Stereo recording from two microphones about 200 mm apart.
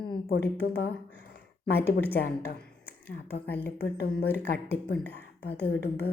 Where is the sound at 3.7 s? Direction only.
55° left (ahead or behind).